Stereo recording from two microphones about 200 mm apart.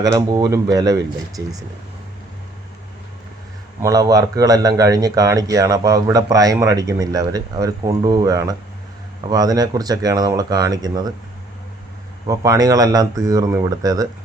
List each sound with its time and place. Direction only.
0.0 s speech: 15° right (ahead or behind)
3.8 s speech: 15° right (ahead or behind)
12.2 s speech: 15° right (ahead or behind)